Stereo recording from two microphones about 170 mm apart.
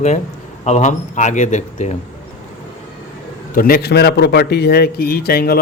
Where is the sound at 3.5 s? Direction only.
60° left (ahead or behind).